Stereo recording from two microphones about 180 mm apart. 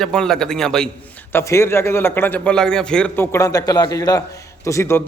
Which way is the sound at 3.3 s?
20° left (ahead or behind).